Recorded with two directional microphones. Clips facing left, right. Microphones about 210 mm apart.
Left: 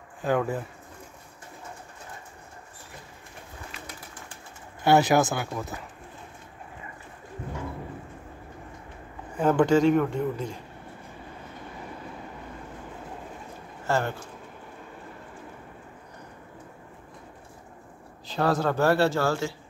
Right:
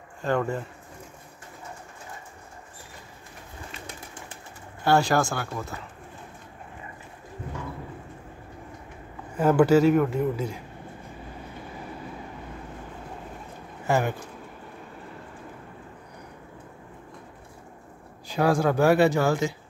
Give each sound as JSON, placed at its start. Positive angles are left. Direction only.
{"t": 0.2, "sound": "speech", "side_deg": 5}
{"t": 4.8, "sound": "speech", "side_deg": 20}
{"t": 9.4, "sound": "speech", "side_deg": -5}
{"t": 13.8, "sound": "speech", "side_deg": -15}
{"t": 18.3, "sound": "speech", "side_deg": -10}